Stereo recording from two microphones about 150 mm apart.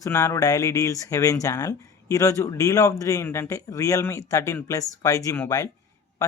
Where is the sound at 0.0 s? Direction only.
20° left (ahead or behind).